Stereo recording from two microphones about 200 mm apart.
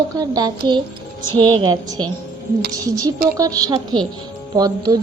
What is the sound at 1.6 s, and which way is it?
Speech, 20° right (ahead or behind).